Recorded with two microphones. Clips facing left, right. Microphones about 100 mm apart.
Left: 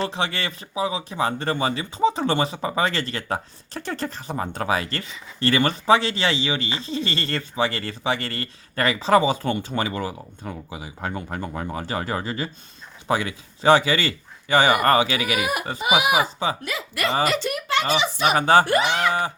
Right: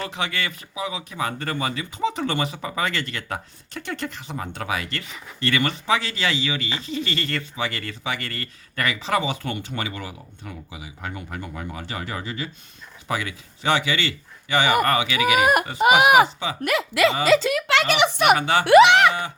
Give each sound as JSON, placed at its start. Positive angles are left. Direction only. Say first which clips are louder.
{"t": 0.0, "sound": "a man's voice", "louder": "left 2 dB", "side_deg": 30}
{"t": 15.4, "sound": "speech", "louder": "right 7 dB", "side_deg": -50}
{"t": 16.6, "sound": "speech", "louder": "right 7 dB", "side_deg": -70}
{"t": 17.5, "sound": "speech", "louder": "right 2 dB", "side_deg": -85}
{"t": 18.3, "sound": "speech", "louder": "left 5 dB", "side_deg": 40}
{"t": 18.6, "sound": "speech", "louder": "right 8 dB", "side_deg": -85}